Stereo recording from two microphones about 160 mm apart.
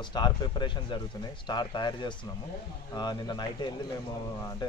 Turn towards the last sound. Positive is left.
turn(degrees=25)  # may be behind; listen again after turning